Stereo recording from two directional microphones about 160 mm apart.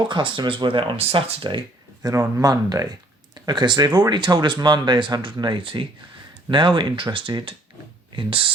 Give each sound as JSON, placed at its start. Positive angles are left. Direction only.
{"t": 0.1, "sound": "speech", "side_deg": -30}